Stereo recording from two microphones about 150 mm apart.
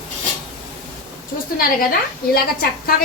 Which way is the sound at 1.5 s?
80° left.